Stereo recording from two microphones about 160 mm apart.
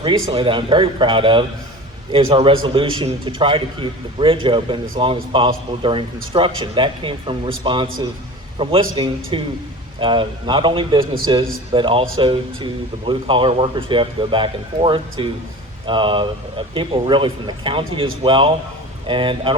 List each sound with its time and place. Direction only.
0.3 s a man's voice: 35° right (ahead or behind)